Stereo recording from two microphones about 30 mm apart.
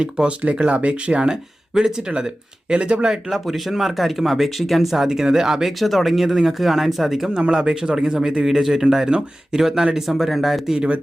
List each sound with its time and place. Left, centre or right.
0.0 s speech: right
1.7 s speech: right
3.1 s speech: centre
5.0 s speech: centre
5.6 s speech: centre
6.2 s speech: centre
7.3 s speech: right
8.4 s speech: centre
10.1 s speech: centre